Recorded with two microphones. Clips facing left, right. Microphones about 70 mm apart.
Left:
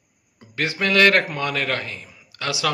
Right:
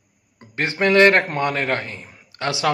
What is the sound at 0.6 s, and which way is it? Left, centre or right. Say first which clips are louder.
Speech: right 4 dB; right.